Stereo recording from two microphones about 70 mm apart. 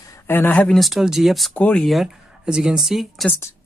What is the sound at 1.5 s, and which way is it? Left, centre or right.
Speech, centre.